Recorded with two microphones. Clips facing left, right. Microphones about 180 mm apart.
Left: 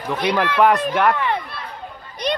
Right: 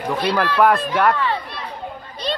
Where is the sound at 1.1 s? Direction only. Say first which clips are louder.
Even; 15° left (ahead or behind).